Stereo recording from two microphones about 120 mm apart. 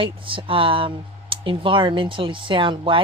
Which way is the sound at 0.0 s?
45° right (ahead or behind).